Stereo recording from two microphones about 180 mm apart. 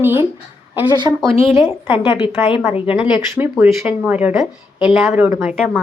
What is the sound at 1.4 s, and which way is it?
Speech, 30° left (ahead or behind).